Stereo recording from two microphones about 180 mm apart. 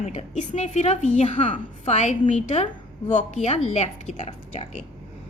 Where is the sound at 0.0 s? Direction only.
40° left (ahead or behind).